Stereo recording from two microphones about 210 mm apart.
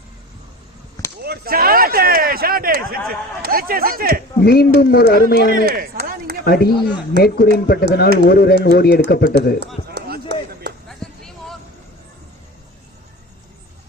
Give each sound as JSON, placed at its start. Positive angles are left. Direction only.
{"t": 1.2, "sound": "speech", "side_deg": -45}
{"t": 4.4, "sound": "speech", "side_deg": 50}
{"t": 5.5, "sound": "chop", "side_deg": -45}
{"t": 6.4, "sound": "speech", "side_deg": 50}
{"t": 9.6, "sound": "a sound", "side_deg": -55}
{"t": 10.8, "sound": "a sound", "side_deg": 0}